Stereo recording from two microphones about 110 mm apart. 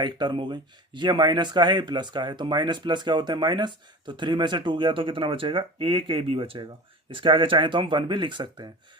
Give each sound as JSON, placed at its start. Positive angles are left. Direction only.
{"t": 0.0, "sound": "speech", "side_deg": -45}